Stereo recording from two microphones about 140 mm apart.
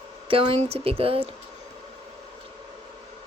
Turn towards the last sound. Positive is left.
turn(degrees=-45)  # may be behind; listen again after turning